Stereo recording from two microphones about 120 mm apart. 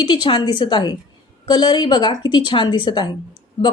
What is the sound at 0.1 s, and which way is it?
A woman's voice, 40° left (ahead or behind).